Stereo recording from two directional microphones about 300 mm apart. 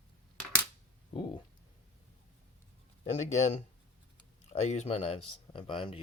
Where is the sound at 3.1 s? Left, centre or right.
Left.